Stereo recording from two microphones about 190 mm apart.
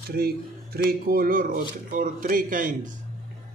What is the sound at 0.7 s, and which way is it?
Speech, 50° right (ahead or behind).